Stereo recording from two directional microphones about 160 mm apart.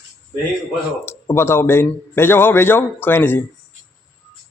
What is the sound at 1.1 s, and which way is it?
A man's voice, 15° left (ahead or behind).